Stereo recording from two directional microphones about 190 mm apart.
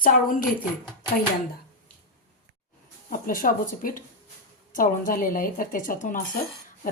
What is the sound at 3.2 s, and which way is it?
Speech, 50° left (ahead or behind).